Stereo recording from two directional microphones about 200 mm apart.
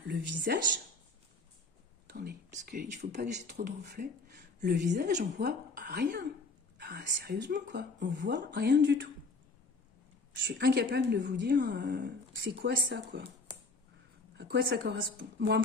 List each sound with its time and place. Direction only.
0.1 s speech: 50° right (ahead or behind)
2.0 s whispering: 55° right (ahead or behind)
2.5 s speech: 40° right (ahead or behind); by 4.9 s 55° right (ahead or behind)
5.2 s speech: 45° right (ahead or behind); by 9.1 s 60° right (ahead or behind)
10.4 s speech: 60° right (ahead or behind)
14.3 s speech: 55° right (ahead or behind)